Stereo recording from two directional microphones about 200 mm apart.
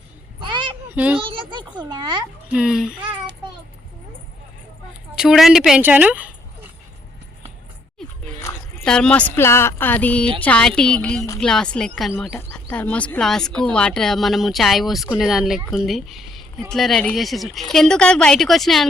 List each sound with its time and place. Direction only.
0.3 s a sound: 25° right (ahead or behind)
0.9 s a child's voice: 5° right (ahead or behind)
1.2 s a child's voice: 25° right (ahead or behind)
2.5 s speech: 5° right (ahead or behind)
5.1 s speech: centre (ahead or behind)
8.4 s speech: 10° left (ahead or behind)